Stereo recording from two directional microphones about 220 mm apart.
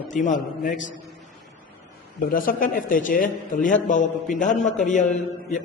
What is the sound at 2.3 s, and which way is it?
A man's voice, 40° left (ahead or behind).